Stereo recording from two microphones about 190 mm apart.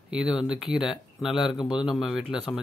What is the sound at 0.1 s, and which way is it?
Speech, 5° right (ahead or behind).